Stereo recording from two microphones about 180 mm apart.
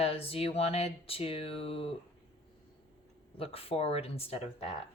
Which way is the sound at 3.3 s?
30° left (ahead or behind).